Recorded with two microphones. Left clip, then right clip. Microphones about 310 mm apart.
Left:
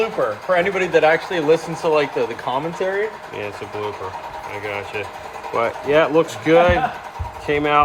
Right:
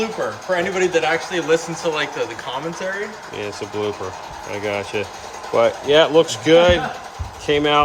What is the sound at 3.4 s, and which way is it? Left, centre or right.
Speech, centre.